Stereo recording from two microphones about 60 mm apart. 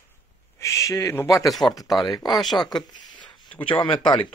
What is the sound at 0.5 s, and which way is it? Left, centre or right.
Speech, left.